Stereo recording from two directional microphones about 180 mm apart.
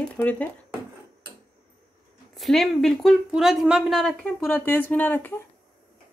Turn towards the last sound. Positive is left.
turn(degrees=10)  # may be behind; listen again after turning